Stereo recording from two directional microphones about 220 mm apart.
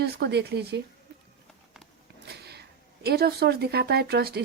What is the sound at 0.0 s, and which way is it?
Speech, 45° right (ahead or behind).